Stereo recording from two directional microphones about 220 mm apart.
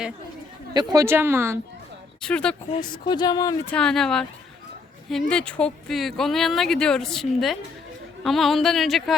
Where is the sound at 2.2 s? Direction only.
5° left (ahead or behind).